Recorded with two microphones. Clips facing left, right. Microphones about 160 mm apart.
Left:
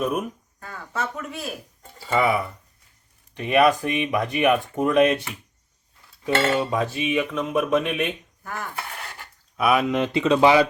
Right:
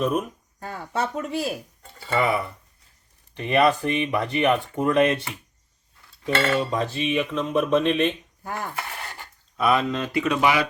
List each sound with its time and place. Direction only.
0.0 s speech: 5° left (ahead or behind)
0.6 s speech: 30° right (ahead or behind)
2.1 s speech: centre (ahead or behind)
6.5 s speech: 10° left (ahead or behind)
8.4 s speech: 35° right (ahead or behind)
9.6 s speech: 10° left (ahead or behind); by 10.7 s 30° left (ahead or behind)